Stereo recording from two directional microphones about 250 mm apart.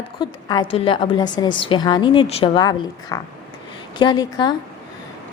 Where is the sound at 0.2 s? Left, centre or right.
Centre.